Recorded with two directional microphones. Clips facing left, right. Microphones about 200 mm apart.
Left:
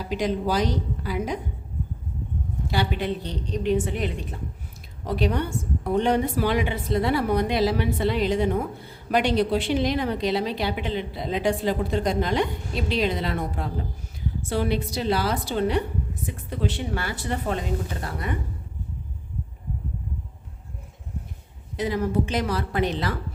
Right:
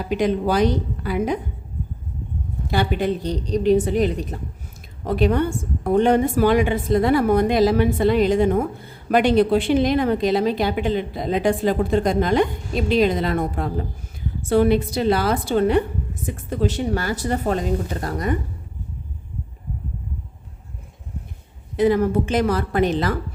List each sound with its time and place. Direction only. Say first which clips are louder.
0.1 s a woman's voice: right 5 dB; 60° right (ahead or behind)
2.6 s speech: right 5 dB; 50° right (ahead or behind)
5.0 s a woman's voice: right 6 dB; 55° right (ahead or behind)
21.8 s a woman's voice: right 7 dB; 55° right (ahead or behind)